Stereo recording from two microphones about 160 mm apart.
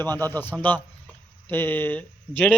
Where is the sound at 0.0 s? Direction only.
15° left (ahead or behind).